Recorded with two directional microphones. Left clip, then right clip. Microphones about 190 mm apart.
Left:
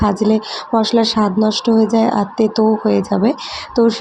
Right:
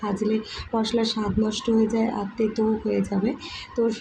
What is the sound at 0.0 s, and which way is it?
Speech, 30° left (ahead or behind).